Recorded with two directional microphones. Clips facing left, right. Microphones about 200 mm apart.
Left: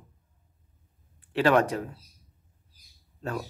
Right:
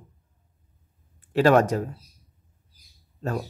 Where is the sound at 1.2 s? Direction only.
45° right (ahead or behind).